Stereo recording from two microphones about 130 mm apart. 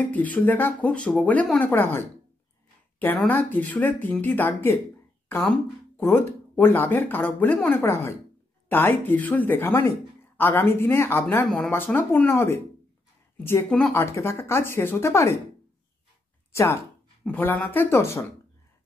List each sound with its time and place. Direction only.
0.0 s speech: 10° left (ahead or behind)
3.3 s speech: 15° left (ahead or behind)
5.9 s speech: 20° left (ahead or behind)
13.9 s speech: 20° left (ahead or behind)
17.2 s speech: 15° left (ahead or behind)